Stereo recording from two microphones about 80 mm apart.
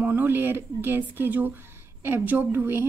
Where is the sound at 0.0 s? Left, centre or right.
Right.